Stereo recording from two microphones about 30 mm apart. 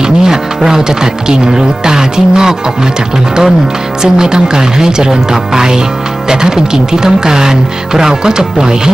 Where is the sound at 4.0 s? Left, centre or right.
Right.